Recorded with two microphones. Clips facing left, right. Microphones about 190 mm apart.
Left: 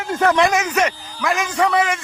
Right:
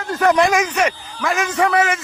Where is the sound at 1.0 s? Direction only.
Centre (ahead or behind).